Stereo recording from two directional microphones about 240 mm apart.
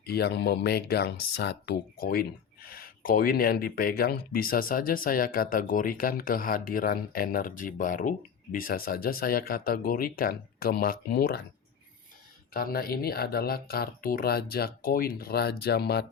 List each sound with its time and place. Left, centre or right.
0.0 s speech: left
12.5 s speech: left